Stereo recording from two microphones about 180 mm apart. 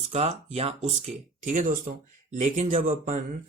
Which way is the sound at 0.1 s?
35° right (ahead or behind).